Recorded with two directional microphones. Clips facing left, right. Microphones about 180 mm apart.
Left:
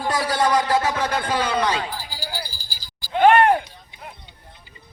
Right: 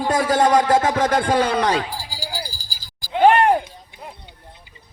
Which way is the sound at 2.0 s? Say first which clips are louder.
Right 1 dB; 10° right (ahead or behind).